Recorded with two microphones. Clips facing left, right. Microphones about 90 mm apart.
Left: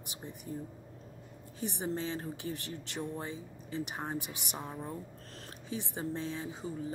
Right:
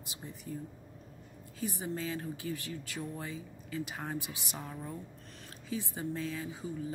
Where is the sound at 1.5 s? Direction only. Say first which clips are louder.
Left 1 dB; 30° left (ahead or behind).